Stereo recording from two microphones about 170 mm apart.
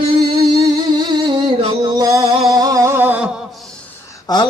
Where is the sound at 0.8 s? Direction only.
25° right (ahead or behind).